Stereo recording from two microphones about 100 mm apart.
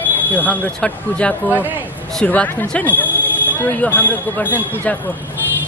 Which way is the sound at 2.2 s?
15° left (ahead or behind).